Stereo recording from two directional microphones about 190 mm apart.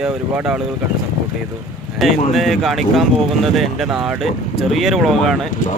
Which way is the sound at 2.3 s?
Centre (ahead or behind).